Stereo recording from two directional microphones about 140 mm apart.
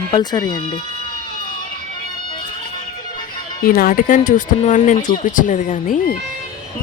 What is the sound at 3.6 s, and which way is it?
Speech, 90° left.